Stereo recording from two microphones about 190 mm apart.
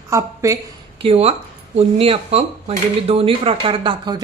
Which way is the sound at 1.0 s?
30° right (ahead or behind).